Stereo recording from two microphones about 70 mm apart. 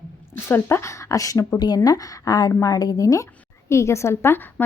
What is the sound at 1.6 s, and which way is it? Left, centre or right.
A woman's voice, left.